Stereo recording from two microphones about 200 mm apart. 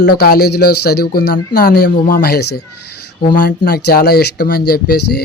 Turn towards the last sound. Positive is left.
turn(degrees=50)  # may be behind; listen again after turning